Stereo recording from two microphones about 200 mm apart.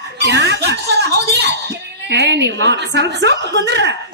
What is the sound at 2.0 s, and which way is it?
A woman's voice, 60° right (ahead or behind).